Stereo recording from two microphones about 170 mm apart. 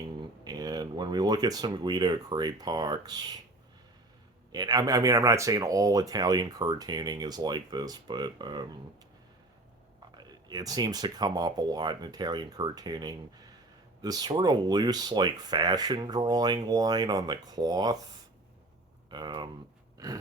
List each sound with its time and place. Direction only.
0.2 s speech: 25° right (ahead or behind)
4.5 s speech: 25° right (ahead or behind)
10.2 s speech: 20° right (ahead or behind)
19.1 s speech: 25° right (ahead or behind)
20.0 s gasp: 20° right (ahead or behind)